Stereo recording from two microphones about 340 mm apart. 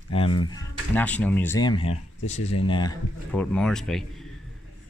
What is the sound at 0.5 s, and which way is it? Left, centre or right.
Speech, centre.